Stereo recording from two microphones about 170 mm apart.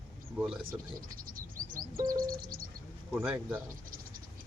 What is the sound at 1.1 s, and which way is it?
Bird, 55° right (ahead or behind).